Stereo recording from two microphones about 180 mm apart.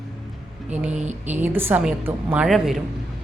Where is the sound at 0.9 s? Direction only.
40° right (ahead or behind).